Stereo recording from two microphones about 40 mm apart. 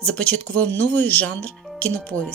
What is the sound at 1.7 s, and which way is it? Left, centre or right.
Speech, left.